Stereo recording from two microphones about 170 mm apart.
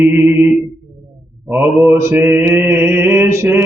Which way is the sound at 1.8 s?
15° right (ahead or behind).